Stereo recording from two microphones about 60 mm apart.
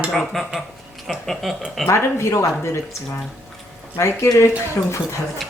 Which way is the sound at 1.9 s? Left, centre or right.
Left.